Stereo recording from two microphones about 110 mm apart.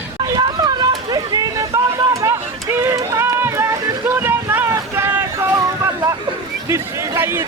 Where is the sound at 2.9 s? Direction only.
30° right (ahead or behind).